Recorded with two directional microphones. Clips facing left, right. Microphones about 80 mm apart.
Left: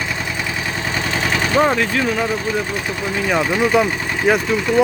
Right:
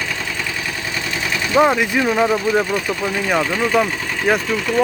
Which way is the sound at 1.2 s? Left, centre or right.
Left.